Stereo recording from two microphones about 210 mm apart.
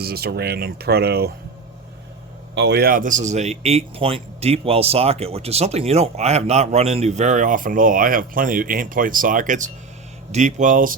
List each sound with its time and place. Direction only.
0.0 s speech: 50° right (ahead or behind)
2.6 s a man's voice: 55° right (ahead or behind)